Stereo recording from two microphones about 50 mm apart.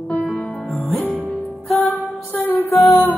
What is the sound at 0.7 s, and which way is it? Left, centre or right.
Music, centre.